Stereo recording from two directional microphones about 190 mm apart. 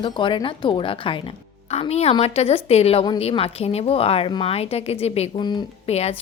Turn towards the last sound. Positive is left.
turn(degrees=35)  # may be behind; listen again after turning